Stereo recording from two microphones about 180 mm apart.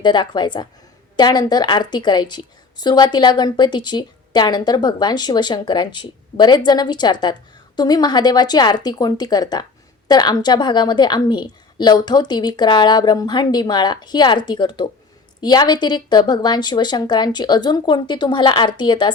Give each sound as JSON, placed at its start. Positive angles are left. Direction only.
{"t": 0.0, "sound": "a woman's voice", "side_deg": 25}